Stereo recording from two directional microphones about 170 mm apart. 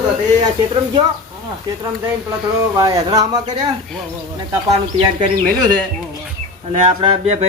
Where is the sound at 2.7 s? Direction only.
20° right (ahead or behind).